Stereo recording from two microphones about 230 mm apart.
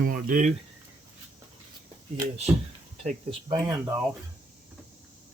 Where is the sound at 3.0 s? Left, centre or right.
Right.